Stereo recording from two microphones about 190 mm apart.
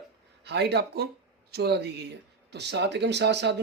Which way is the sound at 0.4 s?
60° right (ahead or behind).